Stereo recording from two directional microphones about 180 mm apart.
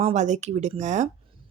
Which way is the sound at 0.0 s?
40° right (ahead or behind).